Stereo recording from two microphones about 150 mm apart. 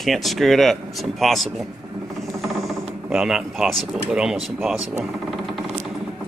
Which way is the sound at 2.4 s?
Centre (ahead or behind).